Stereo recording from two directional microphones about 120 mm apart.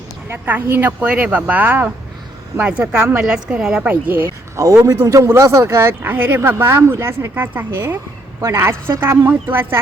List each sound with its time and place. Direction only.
0.3 s a woman's voice: 15° right (ahead or behind)